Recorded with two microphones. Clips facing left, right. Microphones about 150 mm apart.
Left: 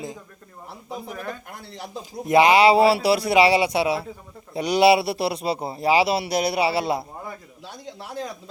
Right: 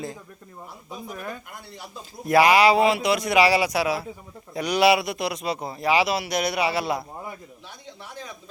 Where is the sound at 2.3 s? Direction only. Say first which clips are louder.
Left 2 dB; 25° left (ahead or behind).